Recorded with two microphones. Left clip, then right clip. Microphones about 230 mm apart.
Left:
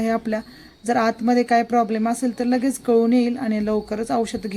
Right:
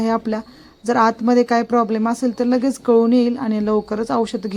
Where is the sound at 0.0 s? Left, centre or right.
Centre.